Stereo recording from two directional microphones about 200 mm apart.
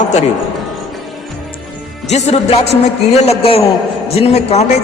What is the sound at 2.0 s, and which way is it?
A man's voice, 35° left (ahead or behind).